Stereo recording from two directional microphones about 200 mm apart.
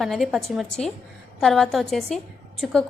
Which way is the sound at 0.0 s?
Centre (ahead or behind).